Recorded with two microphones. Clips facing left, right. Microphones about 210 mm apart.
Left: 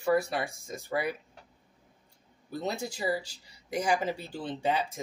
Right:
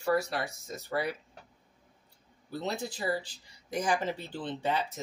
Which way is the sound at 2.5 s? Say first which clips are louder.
Left 1 dB; 10° left (ahead or behind).